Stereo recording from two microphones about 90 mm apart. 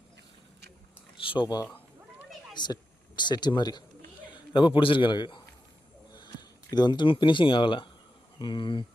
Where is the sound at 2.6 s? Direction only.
55° left (ahead or behind).